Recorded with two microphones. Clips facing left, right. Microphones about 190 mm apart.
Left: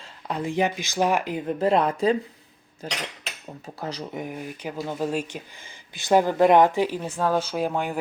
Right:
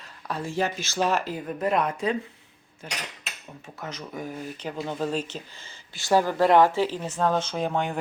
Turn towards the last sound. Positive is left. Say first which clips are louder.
# left 1 dB
turn(degrees=5)  # may be behind; listen again after turning